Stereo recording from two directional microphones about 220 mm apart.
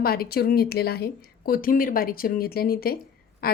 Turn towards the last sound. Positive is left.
turn(degrees=45)  # may be behind; listen again after turning